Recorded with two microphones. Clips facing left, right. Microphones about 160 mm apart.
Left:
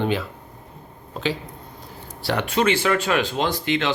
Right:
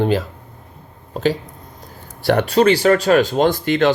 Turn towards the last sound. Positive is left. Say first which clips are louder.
# right 8 dB
turn(degrees=-45)  # may be behind; listen again after turning